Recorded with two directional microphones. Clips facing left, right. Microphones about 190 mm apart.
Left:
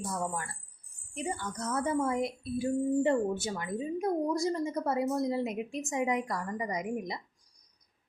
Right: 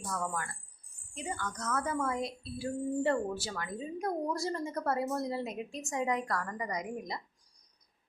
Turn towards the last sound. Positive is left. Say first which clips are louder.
# left 3 dB
turn(degrees=20)  # may be behind; listen again after turning